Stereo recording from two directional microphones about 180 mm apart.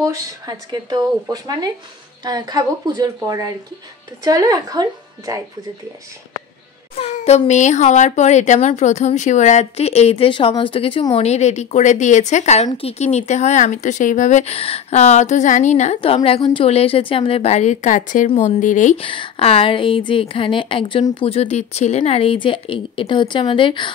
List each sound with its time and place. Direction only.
0.0 s speech: 20° right (ahead or behind)
7.0 s a child's voice: 35° left (ahead or behind)
18.9 s speech: 30° left (ahead or behind)